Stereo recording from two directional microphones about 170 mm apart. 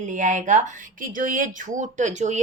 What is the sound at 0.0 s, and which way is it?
Speech, 45° right (ahead or behind).